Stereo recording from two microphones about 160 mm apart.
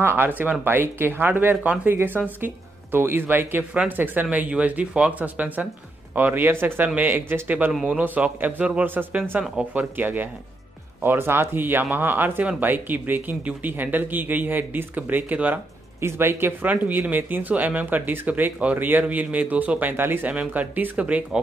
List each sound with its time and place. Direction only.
0.0 s speech: 15° right (ahead or behind)